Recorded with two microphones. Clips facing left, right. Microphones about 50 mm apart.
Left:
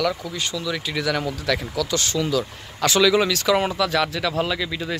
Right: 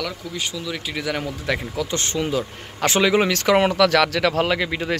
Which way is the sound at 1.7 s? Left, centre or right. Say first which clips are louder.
Left 1 dB; right.